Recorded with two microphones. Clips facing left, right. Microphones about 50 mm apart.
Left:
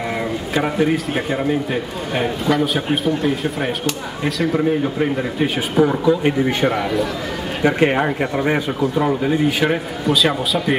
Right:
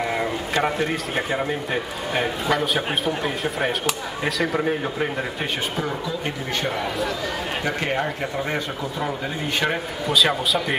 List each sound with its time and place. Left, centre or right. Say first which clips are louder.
0.1 s a man's voice: left 2 dB; centre
5.9 s speech: left 10 dB; left
6.6 s a man's voice: left 7 dB; centre
7.6 s a man's voice: left 10 dB; left; by 10.8 s centre